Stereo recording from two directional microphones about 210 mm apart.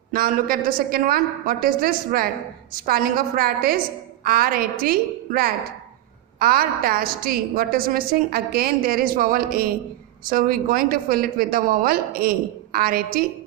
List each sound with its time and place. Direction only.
0.1 s a woman's voice: 40° right (ahead or behind)